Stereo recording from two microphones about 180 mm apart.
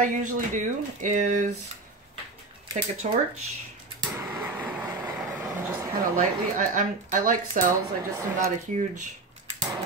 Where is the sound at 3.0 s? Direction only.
40° right (ahead or behind).